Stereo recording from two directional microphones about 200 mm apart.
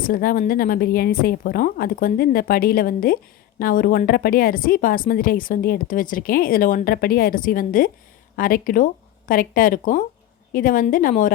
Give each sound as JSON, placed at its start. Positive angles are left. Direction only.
{"t": 0.0, "sound": "speech", "side_deg": 45}